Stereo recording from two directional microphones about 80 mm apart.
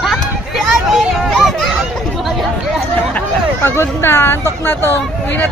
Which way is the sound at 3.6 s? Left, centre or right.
Left.